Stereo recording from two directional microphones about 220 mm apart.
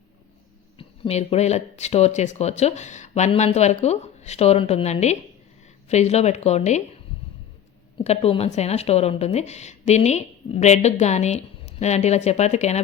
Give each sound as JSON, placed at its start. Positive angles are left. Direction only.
{"t": 0.8, "sound": "a woman's voice", "side_deg": 25}
{"t": 8.0, "sound": "a woman's voice", "side_deg": 30}